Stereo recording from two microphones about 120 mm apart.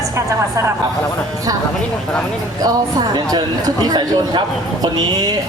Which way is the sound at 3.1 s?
35° right (ahead or behind).